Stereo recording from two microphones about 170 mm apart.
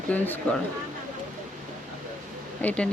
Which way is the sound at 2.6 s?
10° left (ahead or behind).